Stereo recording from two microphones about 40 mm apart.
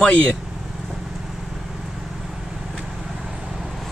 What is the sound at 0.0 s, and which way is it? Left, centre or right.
Speech, left.